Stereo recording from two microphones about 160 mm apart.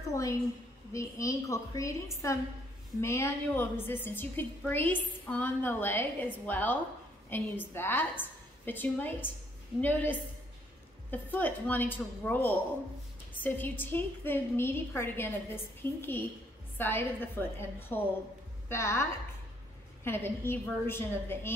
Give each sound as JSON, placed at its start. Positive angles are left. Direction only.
{"t": 0.1, "sound": "a woman's voice", "side_deg": 20}